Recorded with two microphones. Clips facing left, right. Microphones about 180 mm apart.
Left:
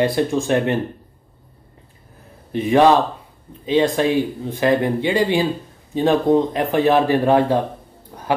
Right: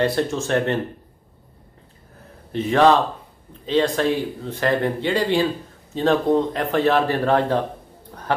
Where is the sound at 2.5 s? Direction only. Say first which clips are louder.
Left 2 dB; 15° left (ahead or behind).